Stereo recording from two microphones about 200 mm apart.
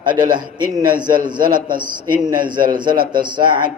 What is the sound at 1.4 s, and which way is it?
Speech, 45° right (ahead or behind).